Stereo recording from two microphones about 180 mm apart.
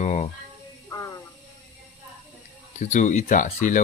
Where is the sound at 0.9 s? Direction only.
15° left (ahead or behind).